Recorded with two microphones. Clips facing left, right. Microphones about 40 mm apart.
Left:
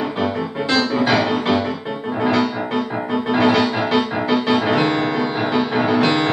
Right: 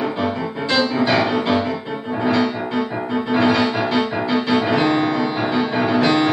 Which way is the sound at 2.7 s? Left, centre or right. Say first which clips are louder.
Even; left.